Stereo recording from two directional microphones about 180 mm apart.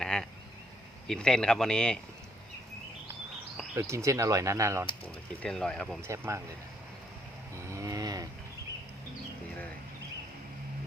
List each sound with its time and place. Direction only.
0.0 s a sound: 5° left (ahead or behind)
1.0 s speech: 5° left (ahead or behind)
3.8 s speech: 15° right (ahead or behind)
5.4 s speech: 5° left (ahead or behind)
6.0 s speech: 15° right (ahead or behind)
7.5 s livestock: 15° right (ahead or behind)